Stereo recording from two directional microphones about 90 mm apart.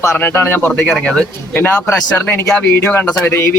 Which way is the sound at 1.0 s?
10° left (ahead or behind).